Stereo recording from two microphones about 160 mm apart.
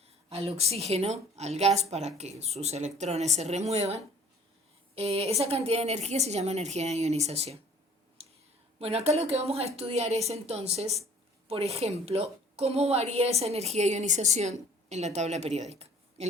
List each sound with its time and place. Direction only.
0.3 s a woman's voice: 40° right (ahead or behind)
8.8 s a woman's voice: 40° right (ahead or behind)
15.7 s a sound: 40° right (ahead or behind)